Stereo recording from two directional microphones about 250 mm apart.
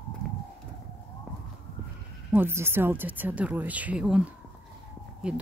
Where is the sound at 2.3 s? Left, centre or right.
Centre.